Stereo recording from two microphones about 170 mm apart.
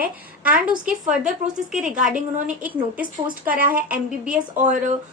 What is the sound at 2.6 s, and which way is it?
A woman's voice, 10° right (ahead or behind).